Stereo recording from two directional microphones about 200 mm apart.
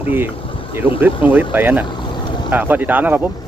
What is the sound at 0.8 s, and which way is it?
Speech, 5° left (ahead or behind).